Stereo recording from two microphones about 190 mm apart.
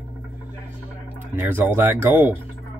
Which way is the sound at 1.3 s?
10° right (ahead or behind).